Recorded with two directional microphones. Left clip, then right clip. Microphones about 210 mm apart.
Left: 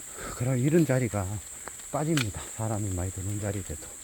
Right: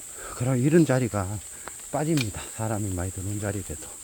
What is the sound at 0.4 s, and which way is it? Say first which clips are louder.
Speech: right 4 dB; 25° right (ahead or behind).